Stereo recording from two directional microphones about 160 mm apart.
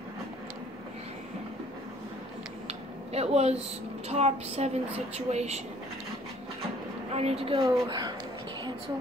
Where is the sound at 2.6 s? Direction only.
40° right (ahead or behind).